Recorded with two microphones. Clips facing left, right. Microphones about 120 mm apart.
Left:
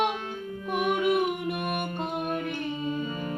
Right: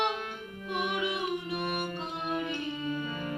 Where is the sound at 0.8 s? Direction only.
50° left (ahead or behind).